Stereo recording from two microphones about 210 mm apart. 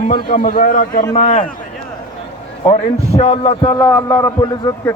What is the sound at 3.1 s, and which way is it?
A man's voice, 25° left (ahead or behind).